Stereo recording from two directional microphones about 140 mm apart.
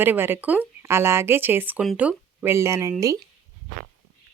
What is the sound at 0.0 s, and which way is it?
Speech, 15° right (ahead or behind).